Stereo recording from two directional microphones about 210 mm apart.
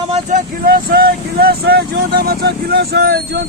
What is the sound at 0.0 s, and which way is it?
Speech, 35° right (ahead or behind).